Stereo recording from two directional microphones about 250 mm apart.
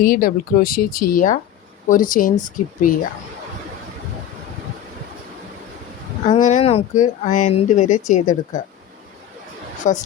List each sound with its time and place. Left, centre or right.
0.0 s speech: left
6.2 s speech: left
9.8 s speech: left